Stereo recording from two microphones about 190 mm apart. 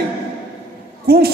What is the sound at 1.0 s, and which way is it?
Speech, 55° right (ahead or behind).